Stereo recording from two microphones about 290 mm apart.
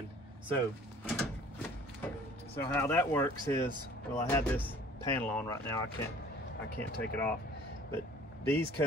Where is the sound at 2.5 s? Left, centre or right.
Centre.